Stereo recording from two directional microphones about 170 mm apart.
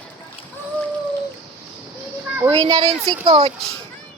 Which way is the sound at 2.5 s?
30° right (ahead or behind).